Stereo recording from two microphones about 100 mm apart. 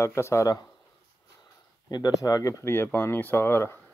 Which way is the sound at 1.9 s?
45° left (ahead or behind).